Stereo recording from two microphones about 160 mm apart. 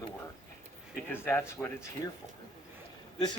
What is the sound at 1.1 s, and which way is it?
Speech, 15° left (ahead or behind).